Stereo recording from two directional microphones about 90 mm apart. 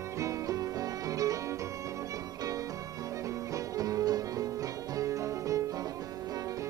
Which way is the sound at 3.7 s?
40° right (ahead or behind).